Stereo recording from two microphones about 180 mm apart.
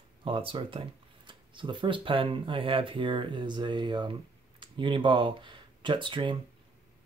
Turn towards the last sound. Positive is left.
turn(degrees=-25)  # may be behind; listen again after turning